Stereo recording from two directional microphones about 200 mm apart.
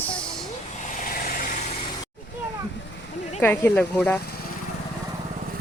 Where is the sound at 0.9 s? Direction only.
45° left (ahead or behind).